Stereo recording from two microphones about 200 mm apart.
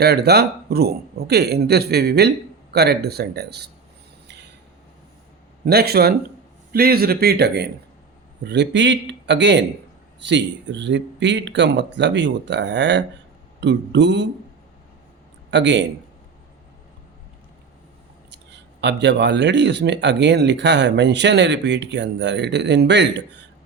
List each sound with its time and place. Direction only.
0.0 s speech: 55° right (ahead or behind)
5.6 s speech: 50° right (ahead or behind)
15.4 s a man's voice: 60° right (ahead or behind)
18.3 s speech: 60° right (ahead or behind)